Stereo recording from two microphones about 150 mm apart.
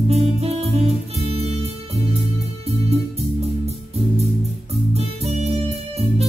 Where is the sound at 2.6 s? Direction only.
45° right (ahead or behind).